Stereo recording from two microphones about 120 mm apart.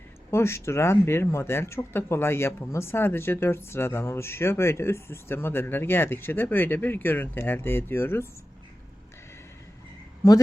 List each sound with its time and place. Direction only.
0.3 s speech: 20° left (ahead or behind)